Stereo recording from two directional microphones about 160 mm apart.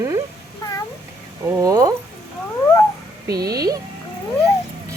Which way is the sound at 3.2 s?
20° right (ahead or behind).